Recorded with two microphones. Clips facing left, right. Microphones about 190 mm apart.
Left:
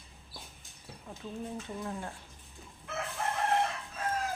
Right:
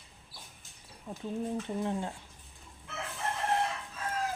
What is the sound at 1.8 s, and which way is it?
Speech, 25° right (ahead or behind).